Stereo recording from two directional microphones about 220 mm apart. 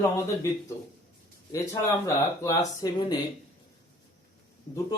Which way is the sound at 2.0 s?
10° left (ahead or behind).